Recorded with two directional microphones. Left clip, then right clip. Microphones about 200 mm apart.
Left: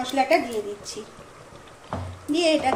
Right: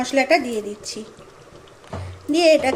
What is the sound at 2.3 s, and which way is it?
Speech, 35° right (ahead or behind).